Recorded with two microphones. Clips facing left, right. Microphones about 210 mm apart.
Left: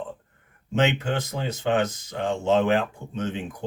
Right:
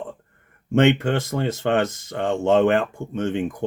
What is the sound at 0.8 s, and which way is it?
Speech, 55° right (ahead or behind).